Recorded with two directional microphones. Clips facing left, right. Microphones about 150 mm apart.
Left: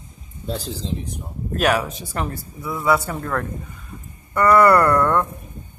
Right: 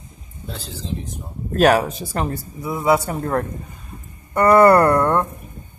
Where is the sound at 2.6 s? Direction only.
25° right (ahead or behind).